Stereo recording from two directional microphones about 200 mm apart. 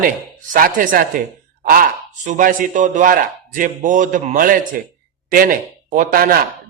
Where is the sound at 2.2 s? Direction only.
40° right (ahead or behind).